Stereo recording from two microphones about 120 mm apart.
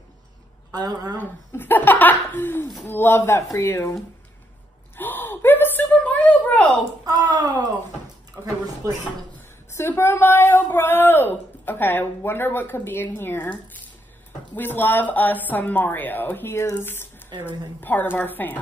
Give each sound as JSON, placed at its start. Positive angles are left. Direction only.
{"t": 0.7, "sound": "a woman's voice", "side_deg": -35}
{"t": 1.1, "sound": "speech", "side_deg": 15}
{"t": 4.9, "sound": "whimper", "side_deg": 15}
{"t": 7.1, "sound": "a sound", "side_deg": -35}
{"t": 8.4, "sound": "a sound", "side_deg": -20}
{"t": 9.8, "sound": "speech", "side_deg": 20}